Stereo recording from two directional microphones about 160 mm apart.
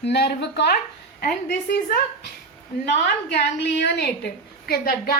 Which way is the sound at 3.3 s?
90° left.